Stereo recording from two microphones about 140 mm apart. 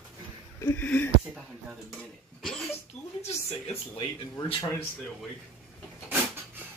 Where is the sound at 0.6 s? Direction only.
15° left (ahead or behind).